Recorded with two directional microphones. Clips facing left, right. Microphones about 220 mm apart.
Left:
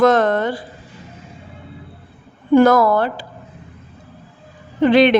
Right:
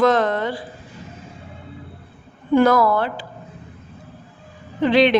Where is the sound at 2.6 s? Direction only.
45° left (ahead or behind).